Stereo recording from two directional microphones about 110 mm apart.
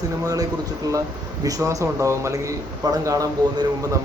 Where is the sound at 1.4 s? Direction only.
30° right (ahead or behind).